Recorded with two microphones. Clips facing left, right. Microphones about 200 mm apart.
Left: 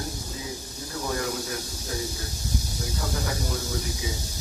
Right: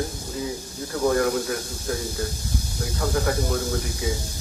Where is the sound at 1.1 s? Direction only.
55° right (ahead or behind).